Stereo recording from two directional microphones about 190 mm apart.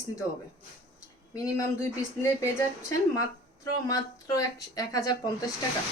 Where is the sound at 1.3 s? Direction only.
15° left (ahead or behind).